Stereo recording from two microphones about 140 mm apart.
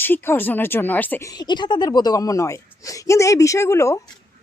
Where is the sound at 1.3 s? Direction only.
30° left (ahead or behind).